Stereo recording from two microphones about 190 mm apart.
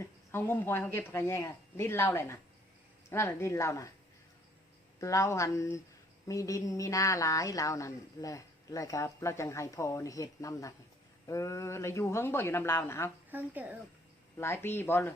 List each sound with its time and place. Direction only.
0.0 s a woman's voice: 15° left (ahead or behind)
4.9 s a woman's voice: 15° left (ahead or behind)
13.3 s a woman's voice: 10° right (ahead or behind)
14.3 s a woman's voice: 15° left (ahead or behind)